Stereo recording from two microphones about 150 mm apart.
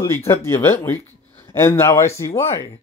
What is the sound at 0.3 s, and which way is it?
Speech, 15° left (ahead or behind).